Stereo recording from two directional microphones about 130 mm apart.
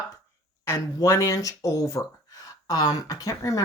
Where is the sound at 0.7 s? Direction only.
25° left (ahead or behind).